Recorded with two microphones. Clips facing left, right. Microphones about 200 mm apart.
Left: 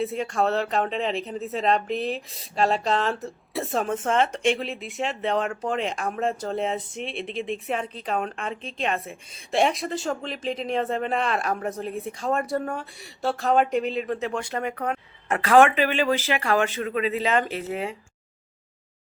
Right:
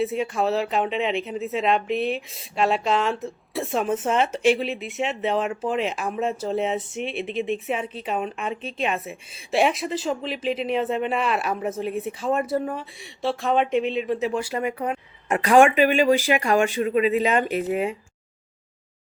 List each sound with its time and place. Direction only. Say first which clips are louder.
0.0 s speech: right 1 dB; 5° right (ahead or behind)